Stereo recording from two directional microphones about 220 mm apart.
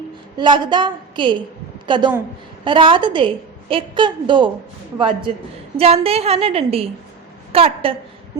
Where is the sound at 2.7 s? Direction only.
20° right (ahead or behind).